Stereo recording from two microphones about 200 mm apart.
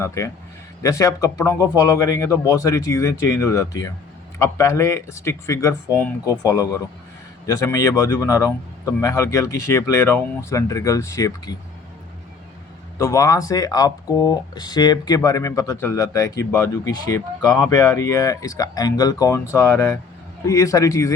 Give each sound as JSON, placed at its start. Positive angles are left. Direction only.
{"t": 0.0, "sound": "a man's voice", "side_deg": 15}
{"t": 13.0, "sound": "speech", "side_deg": 15}